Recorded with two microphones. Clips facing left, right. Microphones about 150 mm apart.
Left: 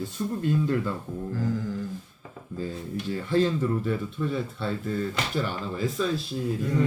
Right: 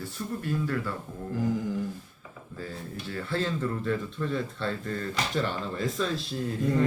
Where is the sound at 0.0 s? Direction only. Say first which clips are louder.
Left 5 dB; 20° left (ahead or behind).